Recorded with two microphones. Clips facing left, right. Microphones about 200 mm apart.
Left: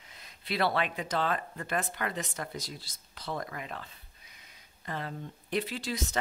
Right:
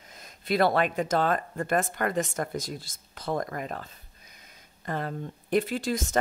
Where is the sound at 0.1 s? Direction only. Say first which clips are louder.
Right 8 dB; 45° right (ahead or behind).